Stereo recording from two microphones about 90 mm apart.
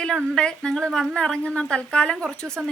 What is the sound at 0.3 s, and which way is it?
A woman's voice, 10° left (ahead or behind).